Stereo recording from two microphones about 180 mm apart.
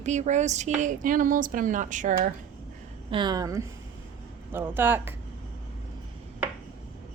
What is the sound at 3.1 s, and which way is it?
A woman's voice, 25° right (ahead or behind).